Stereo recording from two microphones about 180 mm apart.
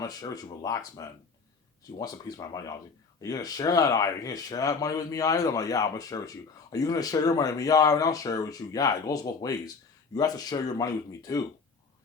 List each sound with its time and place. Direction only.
0.0 s speech: 20° left (ahead or behind)